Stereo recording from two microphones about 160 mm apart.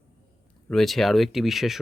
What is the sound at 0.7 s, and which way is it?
Speech, centre (ahead or behind).